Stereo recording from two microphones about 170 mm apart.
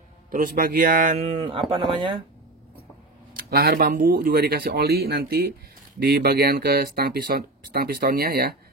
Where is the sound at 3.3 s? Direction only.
60° right (ahead or behind).